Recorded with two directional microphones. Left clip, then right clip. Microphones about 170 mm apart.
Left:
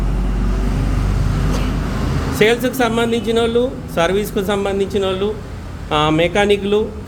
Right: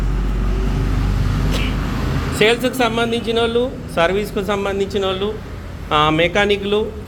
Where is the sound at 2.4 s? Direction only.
20° left (ahead or behind).